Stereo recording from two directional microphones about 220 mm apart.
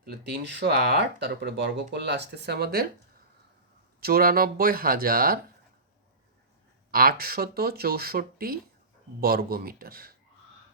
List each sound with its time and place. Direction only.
0.0 s speech: 45° right (ahead or behind)
4.0 s speech: 45° right (ahead or behind)
6.9 s speech: 45° right (ahead or behind)